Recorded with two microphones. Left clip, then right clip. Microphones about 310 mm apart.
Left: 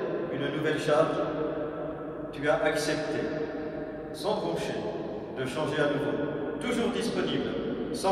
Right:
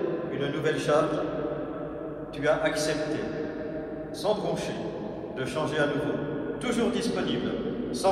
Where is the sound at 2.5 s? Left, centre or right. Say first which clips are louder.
Right 1 dB; centre.